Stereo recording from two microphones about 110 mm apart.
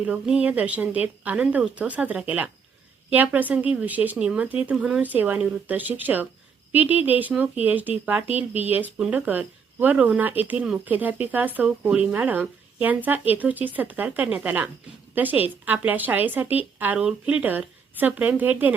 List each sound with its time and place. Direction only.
0.0 s a woman's voice: 10° right (ahead or behind)